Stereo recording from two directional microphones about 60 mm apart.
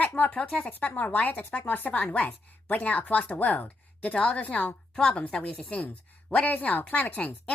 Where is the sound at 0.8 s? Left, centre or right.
Left.